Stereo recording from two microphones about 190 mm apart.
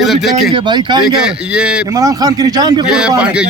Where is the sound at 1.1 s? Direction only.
5° right (ahead or behind).